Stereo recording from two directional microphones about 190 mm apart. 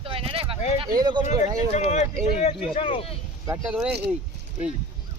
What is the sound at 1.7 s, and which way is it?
Speech, 35° left (ahead or behind).